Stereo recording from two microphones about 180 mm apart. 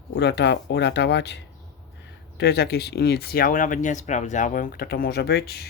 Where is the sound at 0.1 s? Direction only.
70° left (ahead or behind).